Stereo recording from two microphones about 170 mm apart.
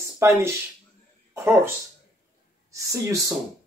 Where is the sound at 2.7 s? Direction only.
20° right (ahead or behind).